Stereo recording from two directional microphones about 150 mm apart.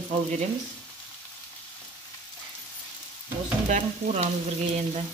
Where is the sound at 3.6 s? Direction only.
50° right (ahead or behind).